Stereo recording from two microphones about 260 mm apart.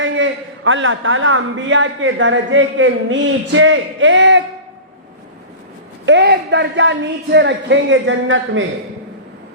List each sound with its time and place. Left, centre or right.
0.0 s a man's voice: right
6.1 s a man's voice: right